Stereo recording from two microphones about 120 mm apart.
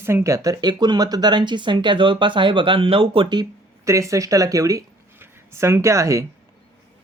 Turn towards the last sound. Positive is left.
turn(degrees=-25)  # may be behind; listen again after turning